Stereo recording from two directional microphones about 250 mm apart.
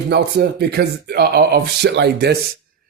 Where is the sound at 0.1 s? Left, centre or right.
Right.